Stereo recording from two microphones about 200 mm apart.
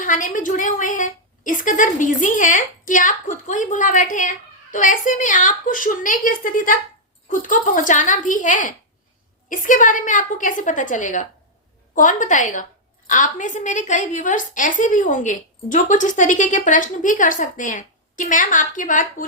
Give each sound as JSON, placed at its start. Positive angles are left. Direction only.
{"t": 0.0, "sound": "a woman's voice", "side_deg": 40}